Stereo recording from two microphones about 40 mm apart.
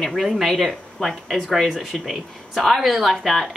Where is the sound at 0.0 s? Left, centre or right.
Centre.